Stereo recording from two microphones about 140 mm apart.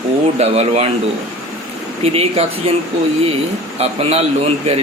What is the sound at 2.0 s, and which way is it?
Speech, 45° right (ahead or behind).